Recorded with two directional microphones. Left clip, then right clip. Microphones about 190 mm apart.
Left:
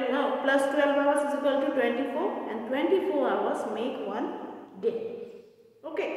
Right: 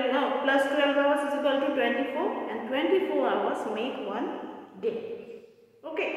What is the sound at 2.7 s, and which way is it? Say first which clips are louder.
A woman's voice: even; 15° left (ahead or behind).